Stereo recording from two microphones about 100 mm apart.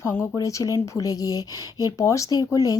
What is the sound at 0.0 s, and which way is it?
Speech, 25° left (ahead or behind).